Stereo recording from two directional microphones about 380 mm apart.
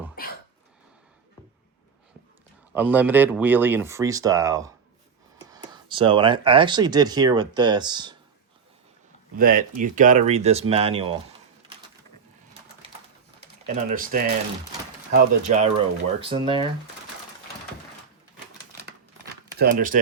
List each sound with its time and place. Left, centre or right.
2.7 s speech: centre
9.3 s speech: right
13.7 s speech: right
19.5 s speech: right